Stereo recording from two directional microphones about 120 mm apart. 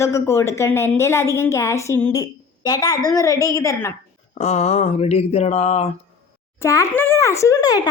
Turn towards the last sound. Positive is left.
turn(degrees=30)  # may be behind; listen again after turning